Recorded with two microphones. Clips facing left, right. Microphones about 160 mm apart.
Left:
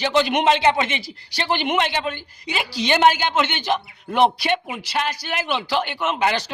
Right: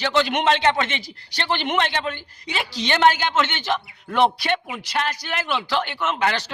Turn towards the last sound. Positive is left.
turn(degrees=15)  # may be behind; listen again after turning